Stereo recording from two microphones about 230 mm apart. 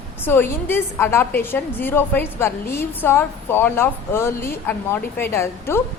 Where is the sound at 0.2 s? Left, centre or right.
Centre.